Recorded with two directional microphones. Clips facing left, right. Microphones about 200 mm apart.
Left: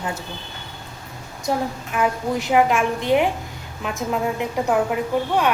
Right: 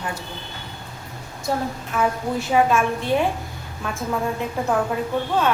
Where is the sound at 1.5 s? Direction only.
15° left (ahead or behind).